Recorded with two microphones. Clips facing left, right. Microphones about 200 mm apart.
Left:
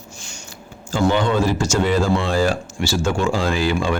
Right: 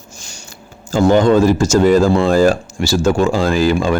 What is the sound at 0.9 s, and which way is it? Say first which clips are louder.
Speech: right 7 dB; 40° right (ahead or behind).